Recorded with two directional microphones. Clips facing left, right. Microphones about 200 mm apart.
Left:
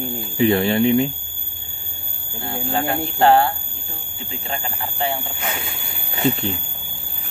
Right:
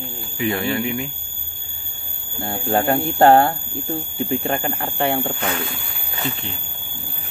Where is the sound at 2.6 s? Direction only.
45° right (ahead or behind).